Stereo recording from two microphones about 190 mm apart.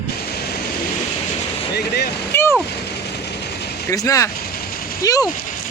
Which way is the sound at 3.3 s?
60° left (ahead or behind).